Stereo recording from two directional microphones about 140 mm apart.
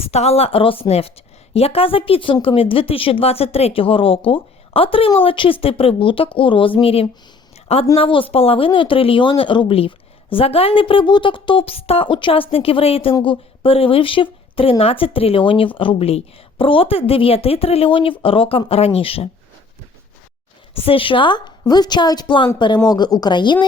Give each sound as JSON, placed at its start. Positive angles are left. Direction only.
{"t": 0.0, "sound": "a woman's voice", "side_deg": 50}
{"t": 20.7, "sound": "a woman's voice", "side_deg": 40}